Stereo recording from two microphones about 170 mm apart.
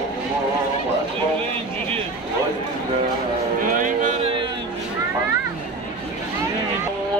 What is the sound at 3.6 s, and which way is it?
Music, 50° right (ahead or behind).